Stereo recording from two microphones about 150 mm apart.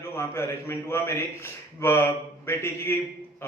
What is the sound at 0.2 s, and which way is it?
A man's voice, 15° left (ahead or behind).